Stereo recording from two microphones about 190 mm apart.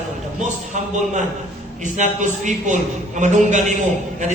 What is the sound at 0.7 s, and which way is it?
A man's voice, 40° right (ahead or behind).